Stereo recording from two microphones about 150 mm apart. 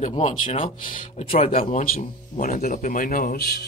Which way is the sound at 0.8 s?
65° left (ahead or behind).